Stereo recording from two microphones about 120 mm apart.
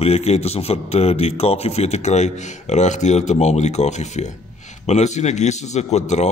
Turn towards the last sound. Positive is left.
turn(degrees=70)  # may be behind; listen again after turning